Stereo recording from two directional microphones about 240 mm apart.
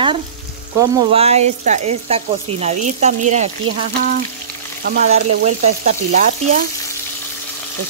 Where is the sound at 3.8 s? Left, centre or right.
Right.